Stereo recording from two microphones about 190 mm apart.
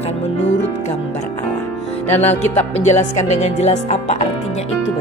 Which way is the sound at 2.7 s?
35° left (ahead or behind).